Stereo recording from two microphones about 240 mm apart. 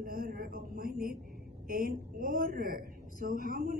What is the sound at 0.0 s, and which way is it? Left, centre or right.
A woman's voice, right.